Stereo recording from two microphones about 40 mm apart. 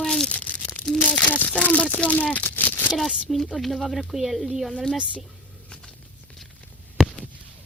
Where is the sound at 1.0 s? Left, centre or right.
Left.